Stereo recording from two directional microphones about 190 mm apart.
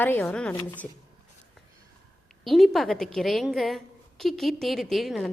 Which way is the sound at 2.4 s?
Centre (ahead or behind).